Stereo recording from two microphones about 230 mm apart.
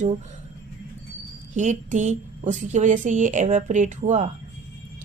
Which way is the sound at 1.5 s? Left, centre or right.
Right.